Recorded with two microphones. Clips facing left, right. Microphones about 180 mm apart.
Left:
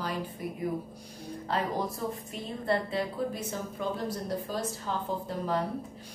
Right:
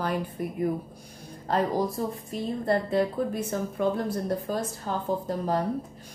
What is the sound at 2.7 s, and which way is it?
A woman's voice, 50° right (ahead or behind).